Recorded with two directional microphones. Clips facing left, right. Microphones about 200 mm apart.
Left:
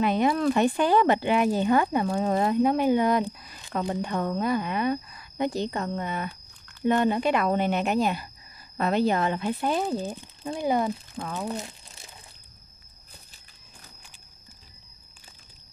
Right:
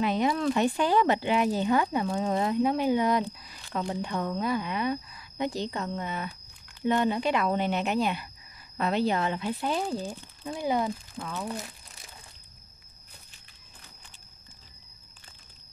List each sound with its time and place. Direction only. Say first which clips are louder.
0.0 s speech: left 3 dB; 55° left (ahead or behind)
11.5 s crumpling: left 3 dB; 25° left (ahead or behind)